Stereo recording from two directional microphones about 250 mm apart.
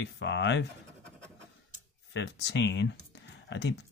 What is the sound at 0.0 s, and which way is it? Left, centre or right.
Speech, left.